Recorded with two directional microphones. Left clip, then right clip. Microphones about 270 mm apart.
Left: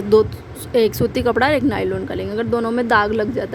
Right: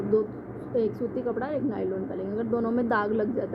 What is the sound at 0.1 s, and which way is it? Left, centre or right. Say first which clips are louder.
Speech: left 12 dB; left.